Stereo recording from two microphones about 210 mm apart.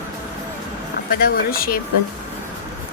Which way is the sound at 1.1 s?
45° left (ahead or behind).